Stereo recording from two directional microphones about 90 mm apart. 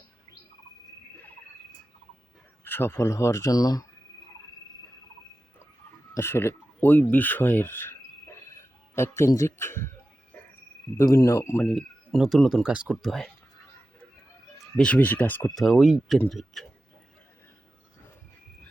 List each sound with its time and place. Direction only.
2.6 s speech: 25° left (ahead or behind)
3.5 s speech: 45° left (ahead or behind)
6.1 s speech: 25° left (ahead or behind)
9.0 s speech: 30° left (ahead or behind)
11.0 s speech: 35° left (ahead or behind)
11.6 s speech: centre (ahead or behind)
14.8 s speech: 15° left (ahead or behind)
15.4 s speech: centre (ahead or behind)